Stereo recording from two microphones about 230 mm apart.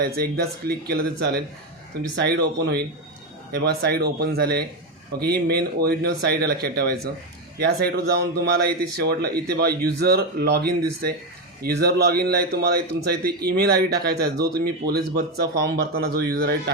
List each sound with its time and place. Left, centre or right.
0.0 s speech: right